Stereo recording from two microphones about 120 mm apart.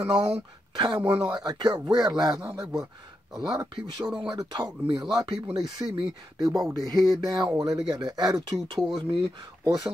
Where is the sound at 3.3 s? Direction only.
35° right (ahead or behind).